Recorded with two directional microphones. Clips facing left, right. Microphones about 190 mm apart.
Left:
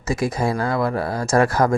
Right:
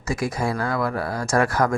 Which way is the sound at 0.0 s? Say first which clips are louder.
Left 3 dB; 20° left (ahead or behind).